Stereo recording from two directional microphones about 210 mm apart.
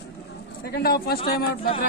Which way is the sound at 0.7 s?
45° left (ahead or behind).